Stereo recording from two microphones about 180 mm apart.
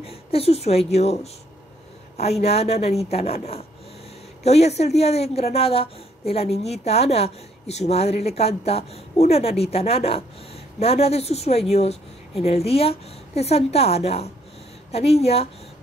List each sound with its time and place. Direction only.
0.0 s speech: 35° left (ahead or behind)
2.4 s a woman's voice: 35° left (ahead or behind)